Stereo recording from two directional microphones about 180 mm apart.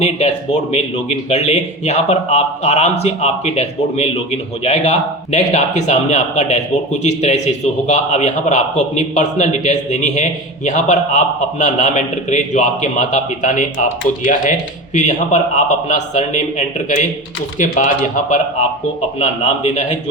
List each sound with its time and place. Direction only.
0.7 s a man's voice: 35° left (ahead or behind)
14.9 s a man's voice: 40° left (ahead or behind)